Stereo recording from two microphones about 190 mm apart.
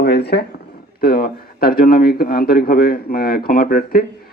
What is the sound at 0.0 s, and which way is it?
Speech, 60° left (ahead or behind).